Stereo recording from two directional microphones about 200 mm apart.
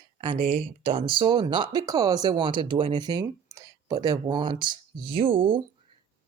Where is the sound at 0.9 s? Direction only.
25° right (ahead or behind).